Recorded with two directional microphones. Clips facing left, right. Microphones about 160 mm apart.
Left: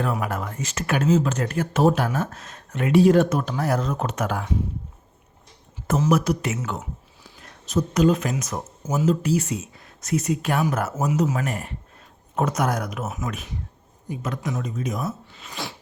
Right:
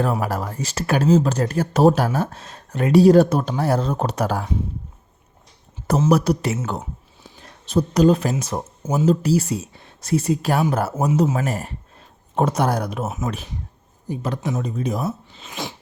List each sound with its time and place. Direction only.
0.0 s speech: 35° right (ahead or behind)
6.0 s speech: 35° right (ahead or behind)